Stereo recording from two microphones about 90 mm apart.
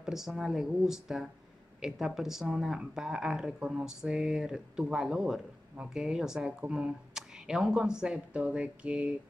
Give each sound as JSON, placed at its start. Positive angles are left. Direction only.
{"t": 0.0, "sound": "speech", "side_deg": -5}